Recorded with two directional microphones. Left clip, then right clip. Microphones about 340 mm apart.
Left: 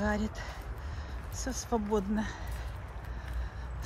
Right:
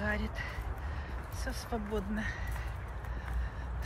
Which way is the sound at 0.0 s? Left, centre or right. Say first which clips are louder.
Left 2 dB; centre.